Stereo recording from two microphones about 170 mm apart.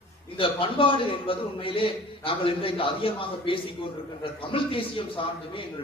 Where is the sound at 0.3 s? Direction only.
30° left (ahead or behind).